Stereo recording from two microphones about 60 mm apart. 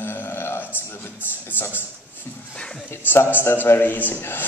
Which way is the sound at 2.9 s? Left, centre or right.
Left.